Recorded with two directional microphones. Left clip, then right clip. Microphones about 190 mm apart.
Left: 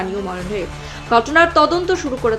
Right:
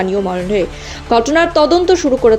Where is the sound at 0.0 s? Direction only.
30° right (ahead or behind).